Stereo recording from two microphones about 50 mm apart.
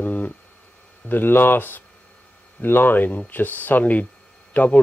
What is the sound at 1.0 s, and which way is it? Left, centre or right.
Speech, left.